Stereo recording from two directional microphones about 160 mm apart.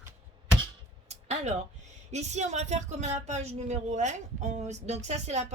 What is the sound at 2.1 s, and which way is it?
Speech, 45° right (ahead or behind).